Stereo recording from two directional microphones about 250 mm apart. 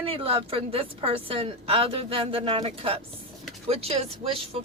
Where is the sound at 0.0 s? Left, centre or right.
Right.